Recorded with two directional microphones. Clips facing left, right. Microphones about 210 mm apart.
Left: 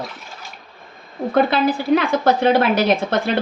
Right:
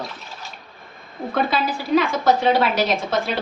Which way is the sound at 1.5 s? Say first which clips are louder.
Left 3 dB; 55° left (ahead or behind).